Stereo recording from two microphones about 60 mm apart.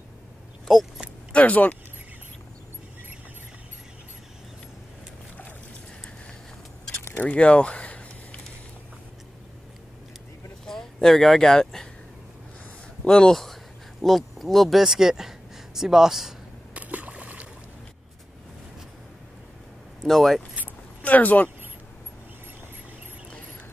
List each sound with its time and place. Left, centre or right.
0.7 s keys jangling: centre
1.3 s speech: left
7.2 s a sound: left
10.6 s speech: centre
13.0 s speech: centre
16.7 s a sound: right
20.0 s speech: centre
21.0 s speech: left